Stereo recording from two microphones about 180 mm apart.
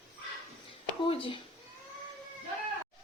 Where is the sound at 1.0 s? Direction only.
30° left (ahead or behind).